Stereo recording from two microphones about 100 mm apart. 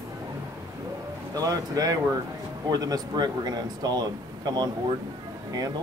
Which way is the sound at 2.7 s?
40° right (ahead or behind).